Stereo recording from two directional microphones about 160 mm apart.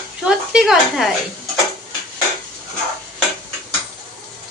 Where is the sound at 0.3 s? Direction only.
Centre (ahead or behind).